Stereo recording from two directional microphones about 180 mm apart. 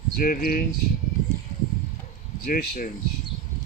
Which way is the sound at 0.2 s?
55° left (ahead or behind).